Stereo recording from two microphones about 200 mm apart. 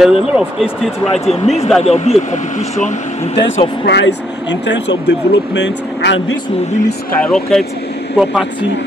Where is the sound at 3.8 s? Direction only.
60° left (ahead or behind).